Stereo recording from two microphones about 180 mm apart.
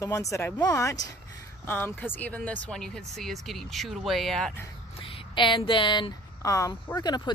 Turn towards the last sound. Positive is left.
turn(degrees=25)  # may be behind; listen again after turning